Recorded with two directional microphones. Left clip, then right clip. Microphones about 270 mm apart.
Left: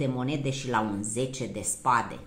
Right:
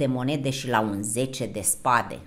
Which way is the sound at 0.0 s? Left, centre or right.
Right.